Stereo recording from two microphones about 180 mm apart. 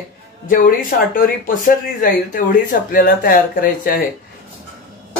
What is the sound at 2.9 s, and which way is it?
Speech, 55° left (ahead or behind).